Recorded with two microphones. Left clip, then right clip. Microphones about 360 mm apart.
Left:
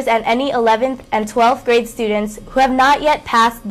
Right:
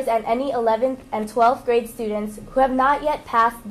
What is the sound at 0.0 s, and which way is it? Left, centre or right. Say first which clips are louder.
A woman's voice: left 5 dB; left.